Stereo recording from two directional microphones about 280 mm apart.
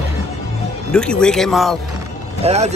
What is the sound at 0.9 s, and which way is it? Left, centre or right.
Speech, centre.